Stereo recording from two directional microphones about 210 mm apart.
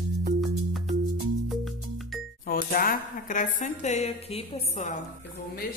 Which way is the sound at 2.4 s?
45° left (ahead or behind).